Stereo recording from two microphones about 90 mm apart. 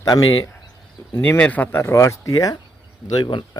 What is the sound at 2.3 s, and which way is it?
Speech, 50° left (ahead or behind).